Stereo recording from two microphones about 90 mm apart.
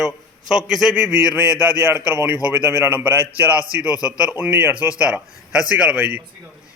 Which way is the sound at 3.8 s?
45° left (ahead or behind).